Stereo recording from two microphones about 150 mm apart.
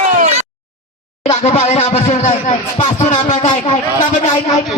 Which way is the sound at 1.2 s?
45° left (ahead or behind).